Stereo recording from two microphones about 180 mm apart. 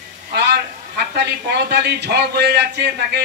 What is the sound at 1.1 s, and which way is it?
A man's voice, 65° right (ahead or behind).